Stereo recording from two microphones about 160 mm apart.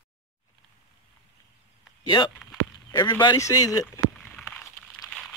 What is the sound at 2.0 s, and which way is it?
Speech, 25° left (ahead or behind).